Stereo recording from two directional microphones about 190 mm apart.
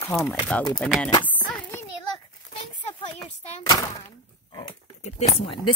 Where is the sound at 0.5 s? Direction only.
5° left (ahead or behind).